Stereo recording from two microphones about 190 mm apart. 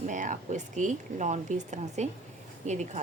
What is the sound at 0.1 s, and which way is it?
Speech, 40° right (ahead or behind).